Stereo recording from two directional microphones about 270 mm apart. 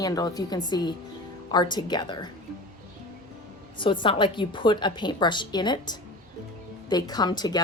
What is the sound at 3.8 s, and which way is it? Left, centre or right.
Speech, centre.